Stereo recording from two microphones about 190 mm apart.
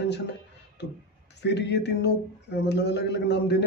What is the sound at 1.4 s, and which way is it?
A man's voice, 65° left (ahead or behind).